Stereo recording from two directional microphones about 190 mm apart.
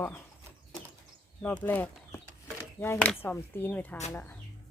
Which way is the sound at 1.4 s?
10° left (ahead or behind).